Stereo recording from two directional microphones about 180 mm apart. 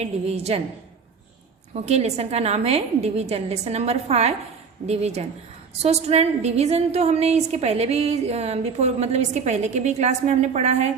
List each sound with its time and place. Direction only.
0.0 s a woman's voice: 35° right (ahead or behind)
1.7 s a woman's voice: 35° right (ahead or behind)